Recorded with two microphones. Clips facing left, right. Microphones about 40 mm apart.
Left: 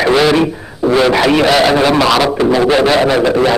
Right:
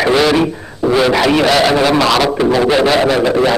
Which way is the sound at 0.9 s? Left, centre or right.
Centre.